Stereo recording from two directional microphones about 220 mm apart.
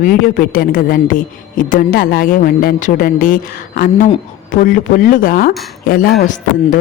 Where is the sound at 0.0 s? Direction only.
40° left (ahead or behind).